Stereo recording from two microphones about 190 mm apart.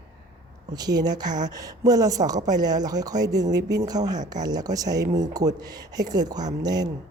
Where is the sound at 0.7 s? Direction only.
20° right (ahead or behind).